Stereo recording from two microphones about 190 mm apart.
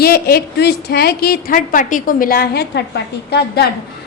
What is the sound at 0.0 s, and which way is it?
A woman's voice, 55° left (ahead or behind).